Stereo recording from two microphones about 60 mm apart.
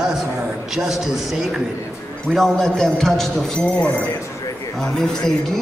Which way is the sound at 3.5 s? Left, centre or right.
Left.